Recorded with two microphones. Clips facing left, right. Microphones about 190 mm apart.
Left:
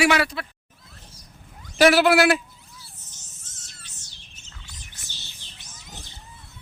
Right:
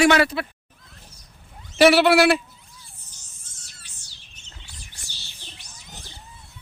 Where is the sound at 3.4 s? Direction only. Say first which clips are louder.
Left 2 dB; 10° right (ahead or behind).